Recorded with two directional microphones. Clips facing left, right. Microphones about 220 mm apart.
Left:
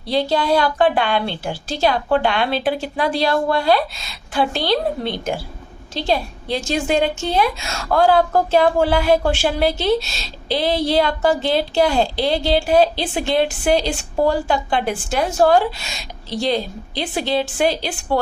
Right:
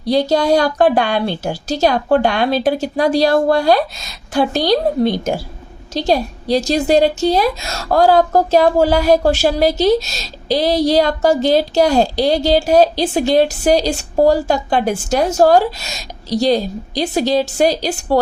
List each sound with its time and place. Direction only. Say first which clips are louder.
0.0 s a woman's voice: right 5 dB; 45° right (ahead or behind)